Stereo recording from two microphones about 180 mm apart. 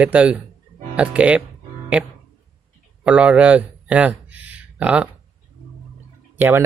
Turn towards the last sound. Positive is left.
turn(degrees=-10)  # may be behind; listen again after turning